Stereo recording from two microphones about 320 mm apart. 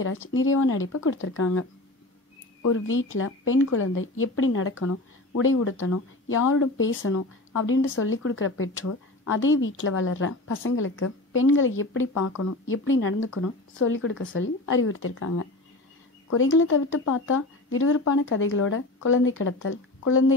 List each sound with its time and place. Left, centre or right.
0.0 s speech: left
12.1 s speech: left